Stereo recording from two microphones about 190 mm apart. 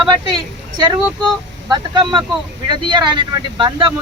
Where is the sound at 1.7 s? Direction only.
25° right (ahead or behind).